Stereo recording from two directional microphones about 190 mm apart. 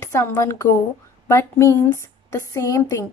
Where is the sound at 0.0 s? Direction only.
15° left (ahead or behind).